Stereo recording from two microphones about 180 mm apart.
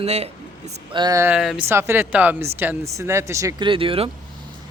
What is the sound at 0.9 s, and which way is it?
Speech, 20° right (ahead or behind).